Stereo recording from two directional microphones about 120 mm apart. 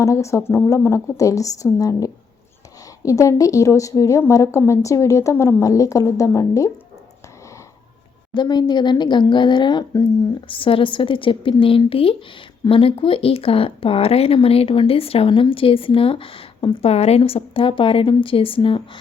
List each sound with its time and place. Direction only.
0.0 s a woman's voice: 25° left (ahead or behind)
8.3 s speech: 40° left (ahead or behind)
10.5 s speech: 50° left (ahead or behind)
16.9 s speech: 60° left (ahead or behind)